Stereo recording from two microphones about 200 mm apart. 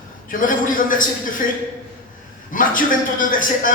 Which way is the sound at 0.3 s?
40° left (ahead or behind).